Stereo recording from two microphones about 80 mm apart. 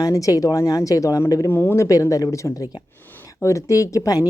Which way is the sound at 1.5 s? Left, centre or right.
Left.